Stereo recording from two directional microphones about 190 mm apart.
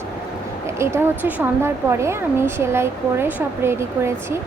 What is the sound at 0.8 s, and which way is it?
Speech, 15° right (ahead or behind).